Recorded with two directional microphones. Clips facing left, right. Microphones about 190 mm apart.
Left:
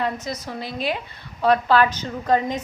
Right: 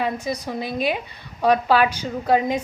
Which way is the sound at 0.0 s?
10° right (ahead or behind).